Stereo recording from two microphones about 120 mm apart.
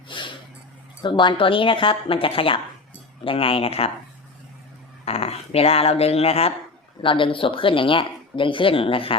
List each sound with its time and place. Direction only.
0.1 s a sound: 40° left (ahead or behind)
1.0 s speech: 40° left (ahead or behind)
5.0 s speech: 55° left (ahead or behind)